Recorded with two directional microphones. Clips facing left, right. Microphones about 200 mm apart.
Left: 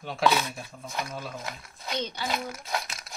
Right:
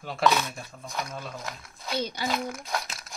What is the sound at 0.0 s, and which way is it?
Speech, centre (ahead or behind).